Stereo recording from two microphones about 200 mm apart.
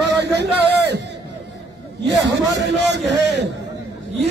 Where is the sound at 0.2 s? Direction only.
55° right (ahead or behind).